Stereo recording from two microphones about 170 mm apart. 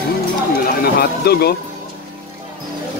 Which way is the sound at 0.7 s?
65° left (ahead or behind).